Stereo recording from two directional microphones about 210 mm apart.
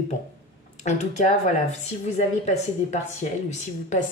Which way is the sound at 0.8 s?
35° left (ahead or behind).